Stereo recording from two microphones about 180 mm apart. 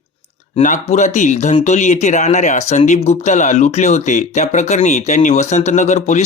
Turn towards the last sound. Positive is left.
turn(degrees=40)  # may be behind; listen again after turning